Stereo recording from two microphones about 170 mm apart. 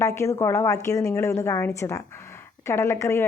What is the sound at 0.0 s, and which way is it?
A woman's voice, 15° left (ahead or behind).